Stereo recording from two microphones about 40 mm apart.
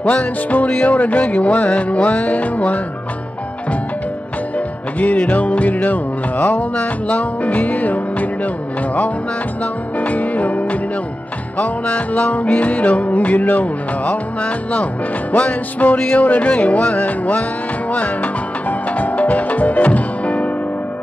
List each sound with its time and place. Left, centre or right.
0.0 s music: left
4.6 s music: left
9.9 s music: left